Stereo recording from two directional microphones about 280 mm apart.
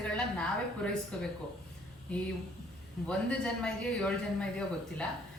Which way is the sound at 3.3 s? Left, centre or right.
Centre.